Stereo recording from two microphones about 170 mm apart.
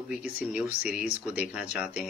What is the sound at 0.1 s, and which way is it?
Speech, 5° right (ahead or behind).